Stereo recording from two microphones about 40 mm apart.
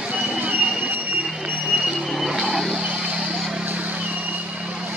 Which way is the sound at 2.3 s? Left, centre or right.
Centre.